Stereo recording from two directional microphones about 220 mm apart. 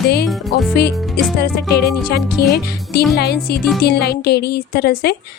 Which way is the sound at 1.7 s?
45° left (ahead or behind).